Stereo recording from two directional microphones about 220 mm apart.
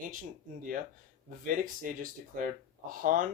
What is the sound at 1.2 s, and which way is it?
Speech, 35° right (ahead or behind).